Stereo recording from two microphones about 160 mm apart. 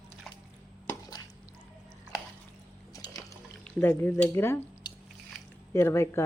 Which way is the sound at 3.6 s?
10° left (ahead or behind).